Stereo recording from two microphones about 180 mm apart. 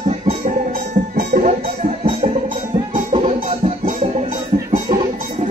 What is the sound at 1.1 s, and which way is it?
Music, 45° right (ahead or behind).